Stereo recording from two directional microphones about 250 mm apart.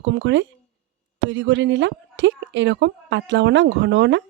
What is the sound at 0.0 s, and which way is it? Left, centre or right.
Speech, right.